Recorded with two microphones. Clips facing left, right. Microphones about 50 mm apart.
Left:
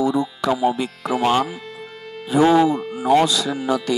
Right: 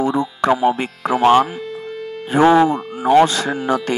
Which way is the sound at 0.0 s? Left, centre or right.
Right.